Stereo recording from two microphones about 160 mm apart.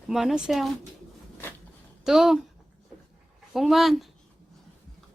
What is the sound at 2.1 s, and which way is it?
Speech, 5° right (ahead or behind).